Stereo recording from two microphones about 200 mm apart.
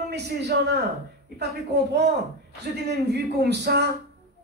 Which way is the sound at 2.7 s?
55° right (ahead or behind).